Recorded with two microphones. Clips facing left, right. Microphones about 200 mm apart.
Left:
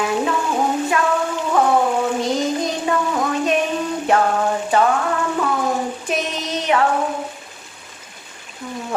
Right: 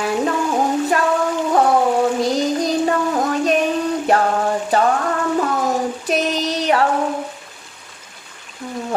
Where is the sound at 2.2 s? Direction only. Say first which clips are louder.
Right 2 dB; 35° right (ahead or behind).